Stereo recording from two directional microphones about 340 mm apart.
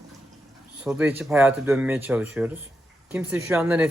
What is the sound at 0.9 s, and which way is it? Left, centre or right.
A man's voice, centre.